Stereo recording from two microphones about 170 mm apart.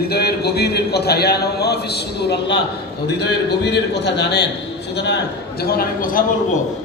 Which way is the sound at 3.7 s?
80° left.